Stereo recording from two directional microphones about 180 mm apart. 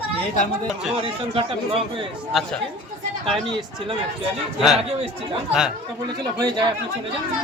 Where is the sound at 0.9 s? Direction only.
30° right (ahead or behind).